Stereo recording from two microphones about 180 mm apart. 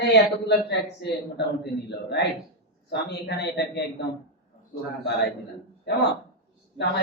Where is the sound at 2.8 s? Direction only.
70° left (ahead or behind).